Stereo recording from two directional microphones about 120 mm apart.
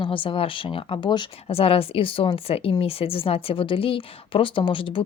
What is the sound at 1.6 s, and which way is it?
A woman's voice, 50° left (ahead or behind).